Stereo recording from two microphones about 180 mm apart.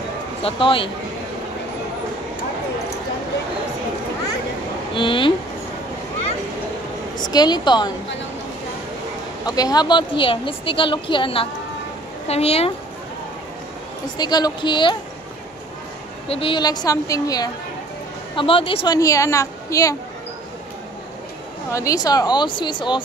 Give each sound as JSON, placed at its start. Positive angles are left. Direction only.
{"t": 0.4, "sound": "a woman's voice", "side_deg": 30}
{"t": 4.9, "sound": "a woman's voice", "side_deg": 25}
{"t": 7.2, "sound": "a woman's voice", "side_deg": 20}
{"t": 9.6, "sound": "a woman's voice", "side_deg": 20}
{"t": 14.1, "sound": "a woman's voice", "side_deg": 20}
{"t": 16.3, "sound": "a woman's voice", "side_deg": 30}
{"t": 18.9, "sound": "a woman's voice", "side_deg": 20}
{"t": 21.7, "sound": "a woman's voice", "side_deg": 20}